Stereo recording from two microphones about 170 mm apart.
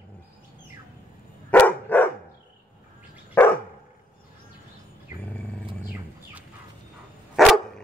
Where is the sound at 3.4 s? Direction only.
10° left (ahead or behind).